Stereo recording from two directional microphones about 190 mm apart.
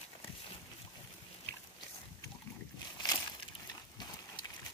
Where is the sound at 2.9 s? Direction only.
20° left (ahead or behind).